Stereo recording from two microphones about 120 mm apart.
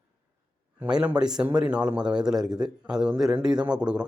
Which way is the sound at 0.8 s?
10° right (ahead or behind).